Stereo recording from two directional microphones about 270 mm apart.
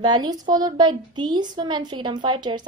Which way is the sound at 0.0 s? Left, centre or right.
Centre.